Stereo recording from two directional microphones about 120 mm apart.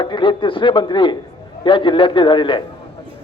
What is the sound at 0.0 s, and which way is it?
A man's voice, 40° left (ahead or behind).